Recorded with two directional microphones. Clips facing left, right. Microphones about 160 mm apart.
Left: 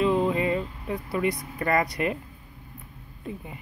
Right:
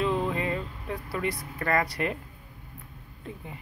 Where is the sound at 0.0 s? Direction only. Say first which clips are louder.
Left 4 dB; 15° left (ahead or behind).